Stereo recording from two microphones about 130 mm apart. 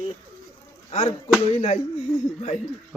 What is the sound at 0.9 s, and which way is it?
Speech, 60° left (ahead or behind).